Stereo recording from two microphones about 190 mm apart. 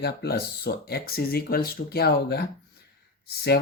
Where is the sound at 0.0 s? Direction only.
55° left (ahead or behind).